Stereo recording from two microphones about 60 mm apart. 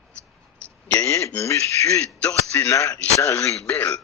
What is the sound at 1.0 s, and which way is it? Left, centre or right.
Speech, left.